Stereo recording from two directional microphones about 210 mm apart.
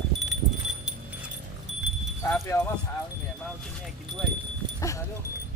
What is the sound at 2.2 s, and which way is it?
Wind chime, 10° left (ahead or behind).